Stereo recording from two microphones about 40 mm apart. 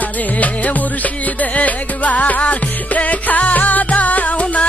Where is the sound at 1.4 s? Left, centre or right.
Left.